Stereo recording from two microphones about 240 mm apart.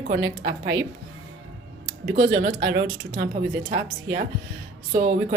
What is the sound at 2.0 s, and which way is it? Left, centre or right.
Speech, right.